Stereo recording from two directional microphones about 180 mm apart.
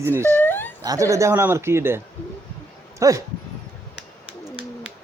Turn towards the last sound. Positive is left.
turn(degrees=-20)  # may be behind; listen again after turning